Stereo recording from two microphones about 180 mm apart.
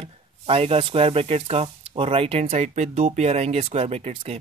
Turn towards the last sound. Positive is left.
turn(degrees=-35)  # may be behind; listen again after turning